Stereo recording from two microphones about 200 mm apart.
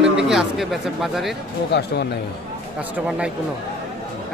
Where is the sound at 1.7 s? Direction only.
55° left (ahead or behind).